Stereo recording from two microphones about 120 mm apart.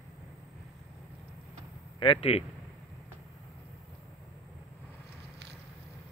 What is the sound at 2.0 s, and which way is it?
Speech, 50° left (ahead or behind).